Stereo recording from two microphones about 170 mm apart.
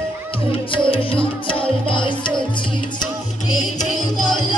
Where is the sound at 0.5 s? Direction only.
30° left (ahead or behind).